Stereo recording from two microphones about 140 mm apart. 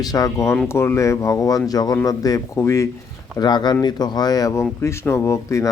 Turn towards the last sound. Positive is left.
turn(degrees=20)  # may be behind; listen again after turning